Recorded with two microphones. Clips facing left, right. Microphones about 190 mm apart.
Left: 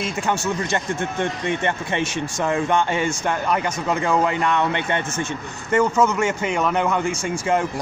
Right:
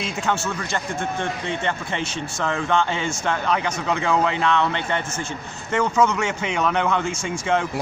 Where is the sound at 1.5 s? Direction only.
60° left (ahead or behind).